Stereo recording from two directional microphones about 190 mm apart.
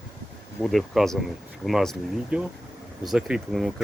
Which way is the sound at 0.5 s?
Centre (ahead or behind).